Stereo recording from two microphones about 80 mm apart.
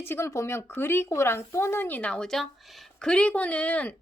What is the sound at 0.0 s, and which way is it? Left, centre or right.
Speech, left.